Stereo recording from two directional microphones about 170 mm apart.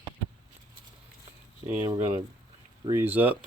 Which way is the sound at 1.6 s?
10° right (ahead or behind).